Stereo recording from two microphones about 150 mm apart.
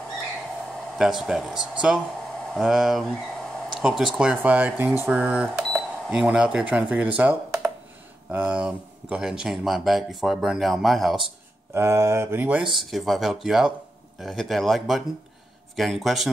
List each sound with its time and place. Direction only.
0.7 s speech: centre (ahead or behind)
11.7 s speech: 15° right (ahead or behind)
12.9 s speech: centre (ahead or behind)